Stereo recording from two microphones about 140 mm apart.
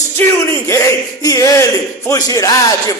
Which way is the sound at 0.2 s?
15° left (ahead or behind).